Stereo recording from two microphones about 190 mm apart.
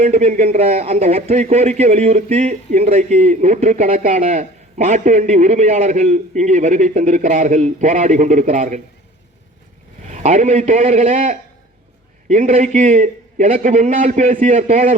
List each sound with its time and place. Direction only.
0.0 s speech: 35° right (ahead or behind)
10.1 s speech: 40° right (ahead or behind)